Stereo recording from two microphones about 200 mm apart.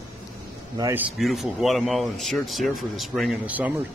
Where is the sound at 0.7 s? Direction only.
15° right (ahead or behind).